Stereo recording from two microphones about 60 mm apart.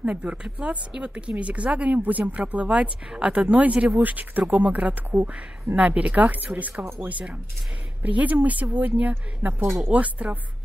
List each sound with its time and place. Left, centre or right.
0.0 s speech: right